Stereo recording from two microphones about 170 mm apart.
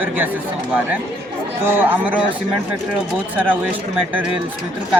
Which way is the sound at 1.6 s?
10° right (ahead or behind).